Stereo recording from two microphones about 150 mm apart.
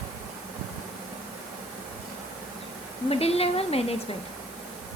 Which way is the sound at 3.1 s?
40° left (ahead or behind).